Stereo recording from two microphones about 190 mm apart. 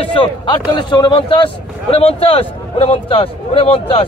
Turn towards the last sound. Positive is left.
turn(degrees=30)  # may be behind; listen again after turning